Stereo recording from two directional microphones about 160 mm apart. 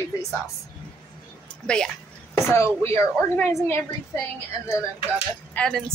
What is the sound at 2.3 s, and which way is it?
Speech, 20° left (ahead or behind).